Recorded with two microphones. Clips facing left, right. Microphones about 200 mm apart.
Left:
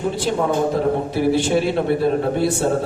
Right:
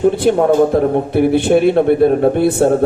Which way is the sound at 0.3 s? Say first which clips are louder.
Right 6 dB; 60° right (ahead or behind).